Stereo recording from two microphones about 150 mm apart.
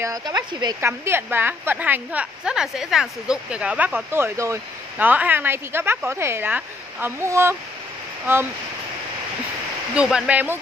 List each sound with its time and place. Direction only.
0.0 s speech: 25° right (ahead or behind)
0.7 s a woman's voice: 15° right (ahead or behind)
9.9 s a woman's voice: 5° right (ahead or behind)